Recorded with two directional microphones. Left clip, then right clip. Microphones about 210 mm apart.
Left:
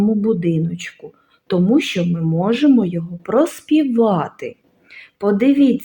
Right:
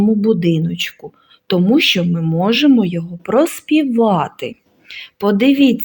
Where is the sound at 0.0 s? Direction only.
30° right (ahead or behind).